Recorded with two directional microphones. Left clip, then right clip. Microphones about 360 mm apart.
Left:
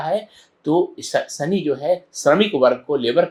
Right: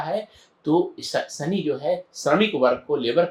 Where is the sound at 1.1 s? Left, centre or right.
Centre.